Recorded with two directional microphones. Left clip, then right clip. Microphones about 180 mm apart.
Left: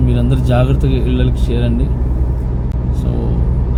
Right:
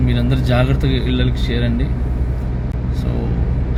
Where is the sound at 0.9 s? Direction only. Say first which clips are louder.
Left 2 dB; 25° right (ahead or behind).